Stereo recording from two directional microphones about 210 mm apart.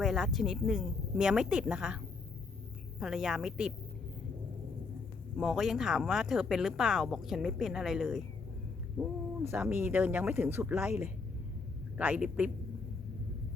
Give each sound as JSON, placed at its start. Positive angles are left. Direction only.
{"t": 0.0, "sound": "speech", "side_deg": 0}
{"t": 3.0, "sound": "speech", "side_deg": 0}
{"t": 5.4, "sound": "speech", "side_deg": 0}